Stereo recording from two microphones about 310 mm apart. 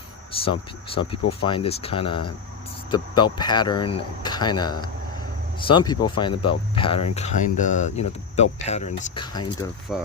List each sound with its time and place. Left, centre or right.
0.4 s speech: centre
9.9 s speech: centre